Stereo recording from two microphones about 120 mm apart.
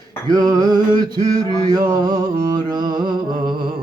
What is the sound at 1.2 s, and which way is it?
Mantra, 35° right (ahead or behind).